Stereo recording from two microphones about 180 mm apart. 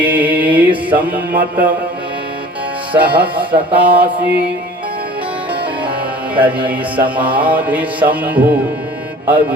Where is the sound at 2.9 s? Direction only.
10° right (ahead or behind).